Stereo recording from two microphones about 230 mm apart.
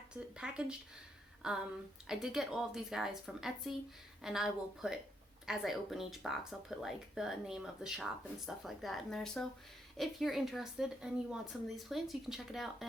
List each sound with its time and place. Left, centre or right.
0.1 s a woman's voice: centre